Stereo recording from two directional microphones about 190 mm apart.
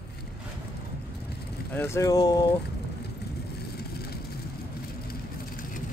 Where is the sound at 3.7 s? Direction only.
55° left (ahead or behind).